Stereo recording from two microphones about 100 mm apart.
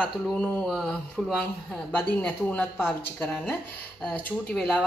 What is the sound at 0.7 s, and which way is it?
Speech, centre (ahead or behind).